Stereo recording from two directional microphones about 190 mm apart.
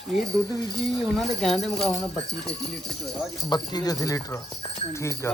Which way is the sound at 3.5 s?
20° left (ahead or behind).